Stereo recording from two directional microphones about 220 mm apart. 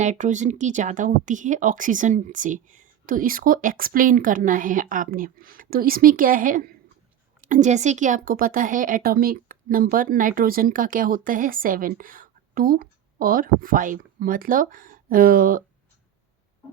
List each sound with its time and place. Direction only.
0.0 s a woman's voice: 35° right (ahead or behind)